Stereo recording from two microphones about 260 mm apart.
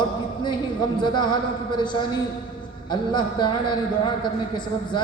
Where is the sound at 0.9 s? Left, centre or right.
Centre.